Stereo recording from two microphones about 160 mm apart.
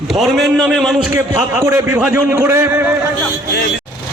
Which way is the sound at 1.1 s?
15° right (ahead or behind).